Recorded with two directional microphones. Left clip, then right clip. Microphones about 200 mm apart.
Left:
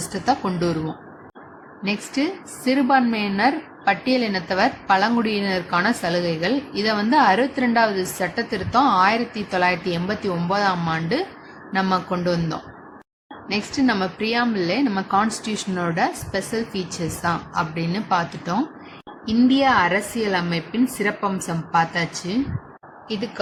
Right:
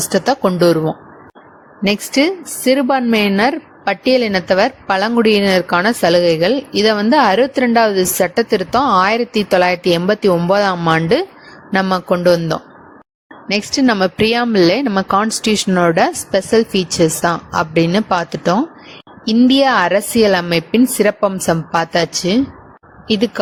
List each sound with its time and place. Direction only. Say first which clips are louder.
0.1 s a woman's voice: right 7 dB; 45° right (ahead or behind)
1.8 s a woman's voice: right 10 dB; 50° right (ahead or behind)